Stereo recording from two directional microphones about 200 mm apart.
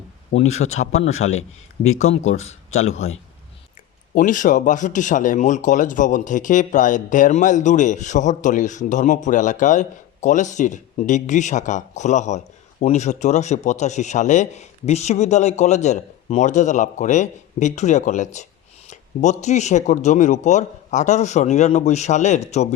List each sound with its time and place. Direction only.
0.3 s speech: 35° left (ahead or behind)
2.6 s a man's voice: 90° left
4.1 s speech: 40° left (ahead or behind)